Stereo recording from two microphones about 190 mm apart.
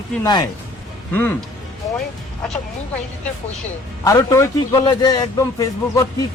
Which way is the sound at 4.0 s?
15° left (ahead or behind).